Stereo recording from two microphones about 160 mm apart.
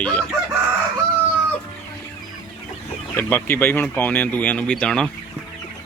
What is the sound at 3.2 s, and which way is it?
Speech, 15° left (ahead or behind).